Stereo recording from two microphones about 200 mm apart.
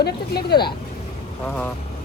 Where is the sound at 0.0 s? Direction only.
55° left (ahead or behind).